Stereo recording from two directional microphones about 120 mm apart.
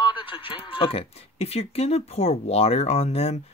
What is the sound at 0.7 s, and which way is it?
Speech, 50° left (ahead or behind).